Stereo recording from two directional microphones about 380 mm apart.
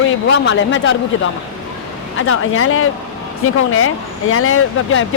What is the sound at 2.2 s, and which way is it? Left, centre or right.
Speech, left.